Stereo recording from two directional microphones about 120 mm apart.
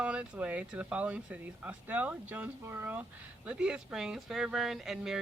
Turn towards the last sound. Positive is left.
turn(degrees=-5)  # may be behind; listen again after turning